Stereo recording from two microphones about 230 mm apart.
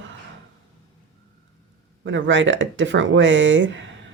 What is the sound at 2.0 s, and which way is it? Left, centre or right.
Speech, right.